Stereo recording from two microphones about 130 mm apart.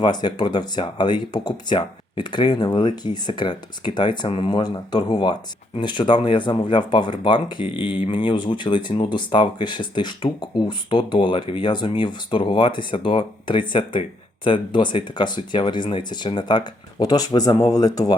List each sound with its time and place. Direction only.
0.0 s speech: 35° left (ahead or behind)